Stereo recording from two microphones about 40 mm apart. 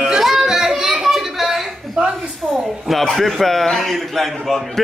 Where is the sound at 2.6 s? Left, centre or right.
Centre.